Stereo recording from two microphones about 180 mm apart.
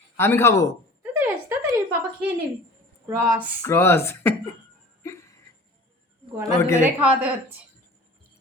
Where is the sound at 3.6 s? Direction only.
15° left (ahead or behind).